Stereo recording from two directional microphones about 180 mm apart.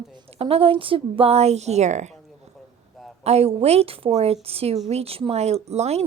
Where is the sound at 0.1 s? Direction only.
30° right (ahead or behind).